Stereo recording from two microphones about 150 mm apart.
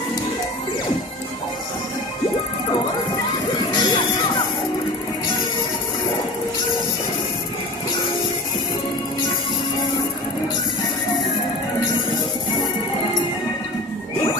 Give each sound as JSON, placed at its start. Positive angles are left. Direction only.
{"t": 3.7, "sound": "music", "side_deg": 25}